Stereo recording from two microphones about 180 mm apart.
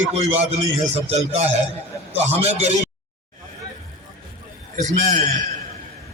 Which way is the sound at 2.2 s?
35° right (ahead or behind).